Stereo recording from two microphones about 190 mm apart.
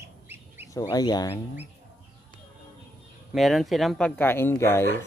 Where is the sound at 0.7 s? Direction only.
20° left (ahead or behind).